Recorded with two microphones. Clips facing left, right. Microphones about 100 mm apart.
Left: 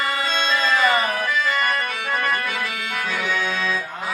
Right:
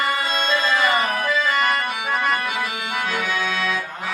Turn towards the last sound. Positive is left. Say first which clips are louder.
# even
turn(degrees=-10)  # may be behind; listen again after turning